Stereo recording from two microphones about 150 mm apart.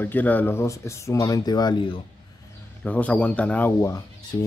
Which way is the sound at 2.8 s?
10° left (ahead or behind).